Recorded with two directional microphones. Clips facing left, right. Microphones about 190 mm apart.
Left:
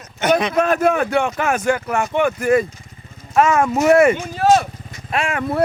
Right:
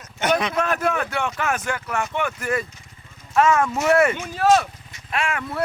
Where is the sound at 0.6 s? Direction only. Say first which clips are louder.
Left 6 dB; 15° left (ahead or behind).